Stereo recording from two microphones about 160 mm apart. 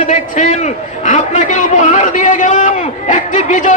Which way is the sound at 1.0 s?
50° left (ahead or behind).